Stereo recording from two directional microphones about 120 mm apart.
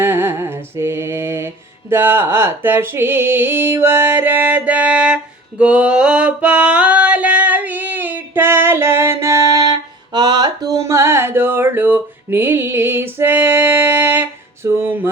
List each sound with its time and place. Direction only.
0.0 s music: 20° right (ahead or behind)